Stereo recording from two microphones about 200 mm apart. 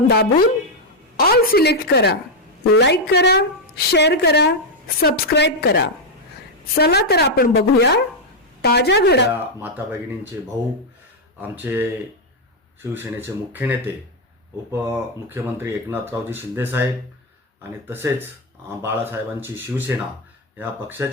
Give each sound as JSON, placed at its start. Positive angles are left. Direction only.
{"t": 0.1, "sound": "a woman's voice", "side_deg": 50}
{"t": 9.3, "sound": "speech", "side_deg": -10}
{"t": 11.3, "sound": "speech", "side_deg": -10}